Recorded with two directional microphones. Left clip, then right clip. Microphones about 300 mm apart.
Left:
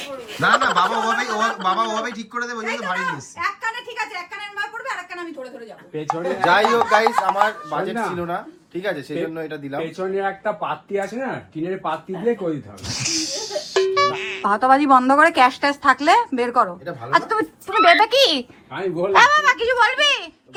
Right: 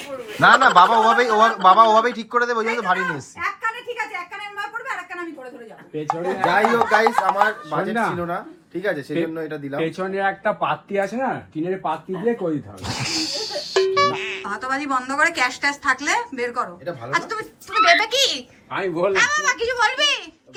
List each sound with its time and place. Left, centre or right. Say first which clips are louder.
0.3 s a woman's voice: right 5 dB; centre
6.1 s a woman's voice: left 3 dB; centre
10.0 s speech: even; right
11.5 s a woman's voice: right 1 dB; centre
12.9 s music: even; centre
14.5 s a woman's voice: left 10 dB; centre
18.7 s speech: right 2 dB; centre
19.1 s a woman's voice: left 9 dB; centre